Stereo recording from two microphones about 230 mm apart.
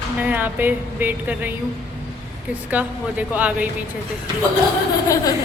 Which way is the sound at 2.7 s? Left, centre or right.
Centre.